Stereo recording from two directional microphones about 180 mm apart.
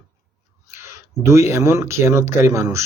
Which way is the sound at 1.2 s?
15° right (ahead or behind).